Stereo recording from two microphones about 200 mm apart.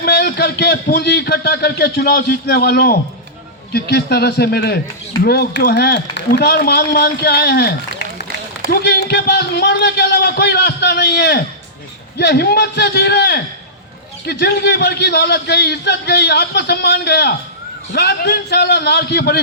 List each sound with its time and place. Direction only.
0.0 s a man's voice: 55° left (ahead or behind)